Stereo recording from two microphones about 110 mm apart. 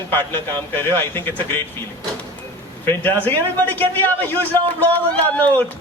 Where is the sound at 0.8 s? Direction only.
20° left (ahead or behind).